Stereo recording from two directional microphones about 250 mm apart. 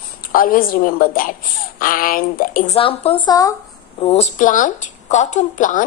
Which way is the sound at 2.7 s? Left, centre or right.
Left.